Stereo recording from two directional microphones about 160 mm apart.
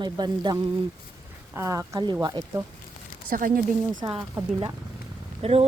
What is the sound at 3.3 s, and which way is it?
Speech, 60° right (ahead or behind).